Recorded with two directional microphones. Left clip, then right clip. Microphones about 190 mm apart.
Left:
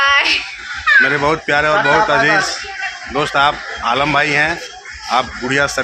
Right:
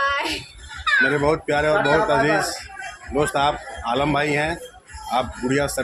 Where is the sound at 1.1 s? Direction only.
5° left (ahead or behind).